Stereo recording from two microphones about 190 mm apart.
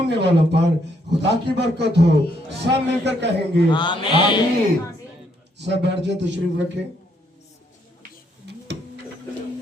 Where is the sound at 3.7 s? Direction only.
25° left (ahead or behind).